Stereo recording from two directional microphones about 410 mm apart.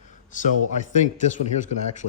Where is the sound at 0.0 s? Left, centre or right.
Centre.